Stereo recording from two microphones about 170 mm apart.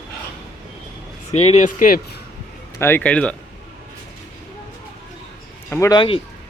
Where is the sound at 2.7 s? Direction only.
15° left (ahead or behind).